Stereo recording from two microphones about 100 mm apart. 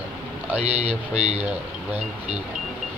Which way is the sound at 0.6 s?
90° right.